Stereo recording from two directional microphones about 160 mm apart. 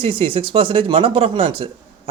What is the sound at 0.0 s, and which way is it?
Speech, 35° right (ahead or behind).